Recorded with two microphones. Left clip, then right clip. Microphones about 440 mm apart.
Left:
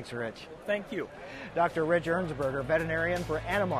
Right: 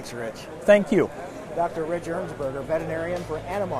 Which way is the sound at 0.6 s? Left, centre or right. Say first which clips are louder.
Right 15 dB; right.